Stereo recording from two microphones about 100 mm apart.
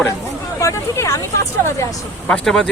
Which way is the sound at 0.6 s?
30° left (ahead or behind).